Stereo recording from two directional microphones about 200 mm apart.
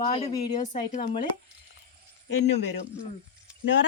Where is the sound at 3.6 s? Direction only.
65° left (ahead or behind).